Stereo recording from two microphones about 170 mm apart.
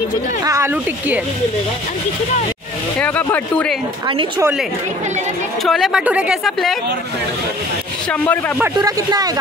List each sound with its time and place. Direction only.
0.4 s a woman's voice: 20° right (ahead or behind)
3.0 s speech: 10° left (ahead or behind)
5.6 s speech: centre (ahead or behind)
8.1 s speech: 10° left (ahead or behind)
8.7 s speech: 20° right (ahead or behind)